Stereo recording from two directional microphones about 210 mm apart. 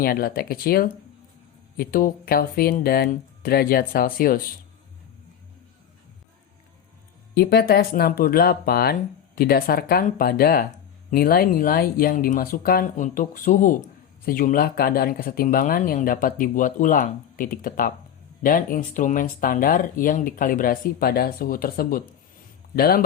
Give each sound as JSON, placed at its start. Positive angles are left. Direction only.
{"t": 0.0, "sound": "speech", "side_deg": 45}
{"t": 7.3, "sound": "speech", "side_deg": 45}